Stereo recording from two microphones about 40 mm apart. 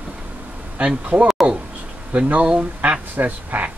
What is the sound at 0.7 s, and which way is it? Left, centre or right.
Speech, right.